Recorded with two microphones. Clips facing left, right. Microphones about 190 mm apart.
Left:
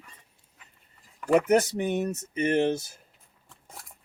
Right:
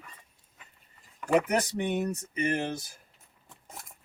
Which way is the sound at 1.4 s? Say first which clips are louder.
Left 6 dB; 40° left (ahead or behind).